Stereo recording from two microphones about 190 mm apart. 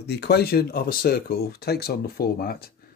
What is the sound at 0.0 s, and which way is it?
Speech, 60° left (ahead or behind).